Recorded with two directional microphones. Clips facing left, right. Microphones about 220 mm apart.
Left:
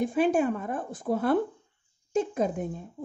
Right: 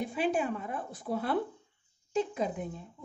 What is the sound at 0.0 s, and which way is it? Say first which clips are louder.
A woman's voice: left 7 dB; 45° left (ahead or behind).